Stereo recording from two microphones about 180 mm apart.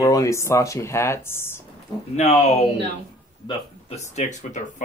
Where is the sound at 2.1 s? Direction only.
35° left (ahead or behind).